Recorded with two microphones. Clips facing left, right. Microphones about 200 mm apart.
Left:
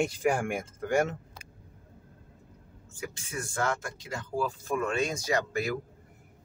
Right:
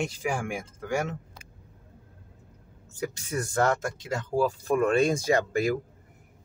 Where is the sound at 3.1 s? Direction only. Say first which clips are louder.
Right 6 dB; 40° right (ahead or behind).